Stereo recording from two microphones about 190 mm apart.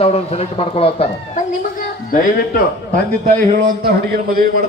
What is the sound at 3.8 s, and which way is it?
Speech, 50° right (ahead or behind).